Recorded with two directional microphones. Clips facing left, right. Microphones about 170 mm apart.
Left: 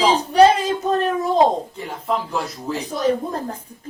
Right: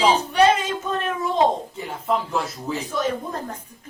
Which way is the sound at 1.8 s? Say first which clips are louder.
Even; centre (ahead or behind).